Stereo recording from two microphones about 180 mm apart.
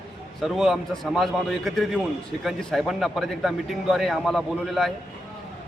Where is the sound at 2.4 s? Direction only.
Centre (ahead or behind).